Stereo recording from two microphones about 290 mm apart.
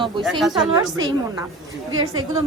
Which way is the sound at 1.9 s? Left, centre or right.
Right.